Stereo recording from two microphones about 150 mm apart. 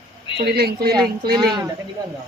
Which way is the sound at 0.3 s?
90° right.